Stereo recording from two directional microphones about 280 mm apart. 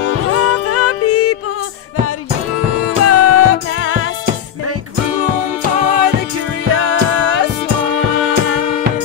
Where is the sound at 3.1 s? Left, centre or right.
Left.